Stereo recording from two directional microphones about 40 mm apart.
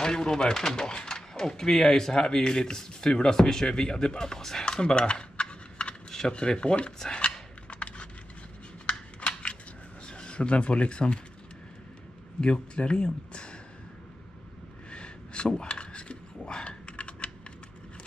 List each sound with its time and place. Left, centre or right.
0.0 s speech: centre
4.6 s a sound: left
7.7 s computer keyboard: left
8.9 s scissors: left
10.0 s speech: left
12.4 s speech: left
14.9 s a sound: left